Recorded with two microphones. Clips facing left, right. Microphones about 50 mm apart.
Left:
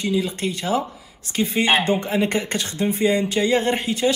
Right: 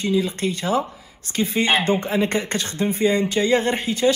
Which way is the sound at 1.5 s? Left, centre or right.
Left.